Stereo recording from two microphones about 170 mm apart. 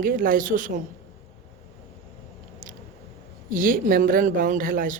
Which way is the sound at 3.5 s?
55° right (ahead or behind).